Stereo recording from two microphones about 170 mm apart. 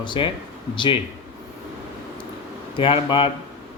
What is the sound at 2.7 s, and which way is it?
Speech, 30° left (ahead or behind).